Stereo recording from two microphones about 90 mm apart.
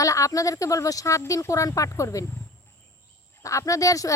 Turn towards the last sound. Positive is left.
turn(degrees=40)  # may be behind; listen again after turning